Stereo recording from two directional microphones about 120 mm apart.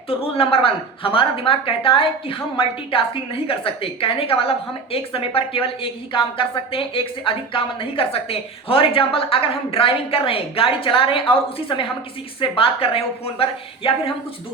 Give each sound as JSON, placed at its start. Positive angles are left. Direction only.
{"t": 0.2, "sound": "a woman's voice", "side_deg": 50}